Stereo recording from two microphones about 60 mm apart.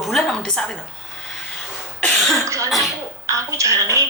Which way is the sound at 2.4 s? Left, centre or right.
Right.